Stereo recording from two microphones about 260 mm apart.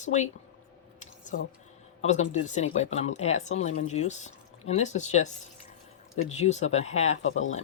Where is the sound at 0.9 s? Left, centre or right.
Left.